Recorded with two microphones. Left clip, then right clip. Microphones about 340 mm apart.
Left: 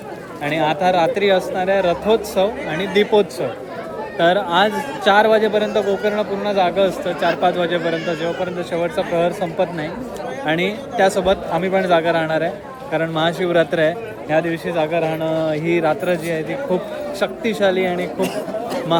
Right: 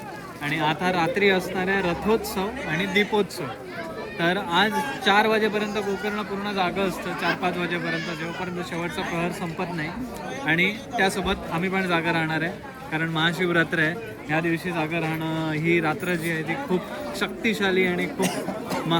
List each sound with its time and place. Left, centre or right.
0.5 s speech: centre
18.2 s speech: right